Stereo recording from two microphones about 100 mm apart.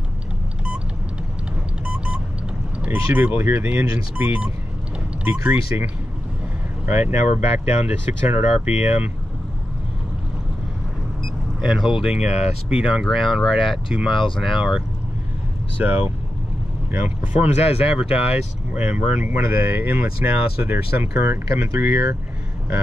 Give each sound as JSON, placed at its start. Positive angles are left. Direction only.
{"t": 1.9, "sound": "vehicle", "side_deg": -10}
{"t": 2.8, "sound": "speech", "side_deg": -15}
{"t": 6.9, "sound": "speech", "side_deg": -20}
{"t": 11.6, "sound": "speech", "side_deg": -5}
{"t": 15.8, "sound": "speech", "side_deg": -20}
{"t": 17.6, "sound": "speech", "side_deg": 85}
{"t": 18.7, "sound": "speech", "side_deg": -10}